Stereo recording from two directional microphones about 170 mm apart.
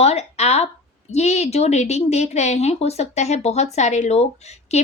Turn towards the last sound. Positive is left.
turn(degrees=40)  # may be behind; listen again after turning